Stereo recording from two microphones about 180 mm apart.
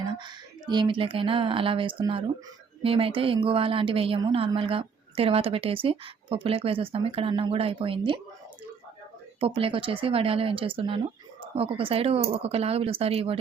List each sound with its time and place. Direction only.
0.7 s a woman's voice: 25° right (ahead or behind)
9.4 s a woman's voice: 30° right (ahead or behind)